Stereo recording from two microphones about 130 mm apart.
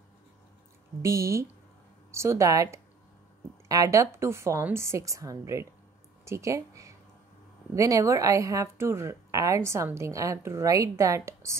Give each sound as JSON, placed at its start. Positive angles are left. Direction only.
{"t": 1.0, "sound": "a woman's voice", "side_deg": -25}